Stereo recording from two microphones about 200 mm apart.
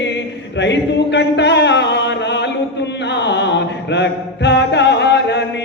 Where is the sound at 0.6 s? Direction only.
60° left (ahead or behind).